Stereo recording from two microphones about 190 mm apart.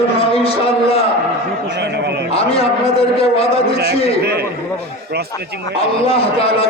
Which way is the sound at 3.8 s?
55° right (ahead or behind).